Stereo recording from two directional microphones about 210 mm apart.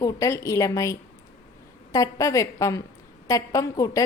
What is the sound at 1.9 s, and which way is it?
A woman's voice, 15° left (ahead or behind).